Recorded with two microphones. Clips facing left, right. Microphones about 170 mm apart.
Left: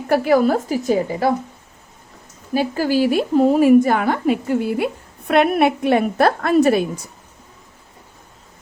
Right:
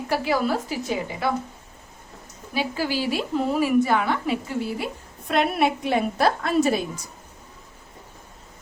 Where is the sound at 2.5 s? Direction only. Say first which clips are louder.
Left 7 dB; 45° left (ahead or behind).